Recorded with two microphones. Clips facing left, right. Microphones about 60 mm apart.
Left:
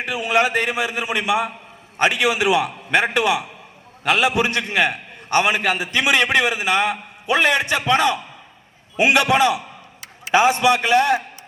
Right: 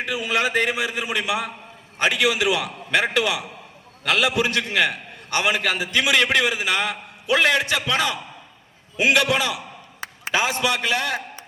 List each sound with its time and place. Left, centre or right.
0.3 s a man's voice: left